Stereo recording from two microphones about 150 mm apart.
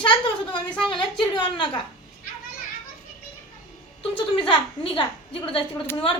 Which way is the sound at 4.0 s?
40° left (ahead or behind).